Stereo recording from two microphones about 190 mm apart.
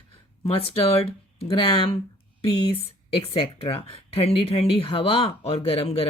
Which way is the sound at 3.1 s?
30° left (ahead or behind).